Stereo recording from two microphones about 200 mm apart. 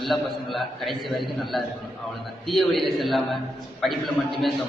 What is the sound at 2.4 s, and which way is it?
A man's voice, centre (ahead or behind).